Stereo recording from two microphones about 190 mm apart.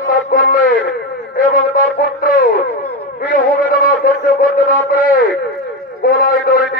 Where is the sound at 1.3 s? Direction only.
50° left (ahead or behind).